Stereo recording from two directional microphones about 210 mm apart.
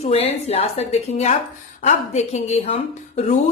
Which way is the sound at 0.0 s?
30° left (ahead or behind).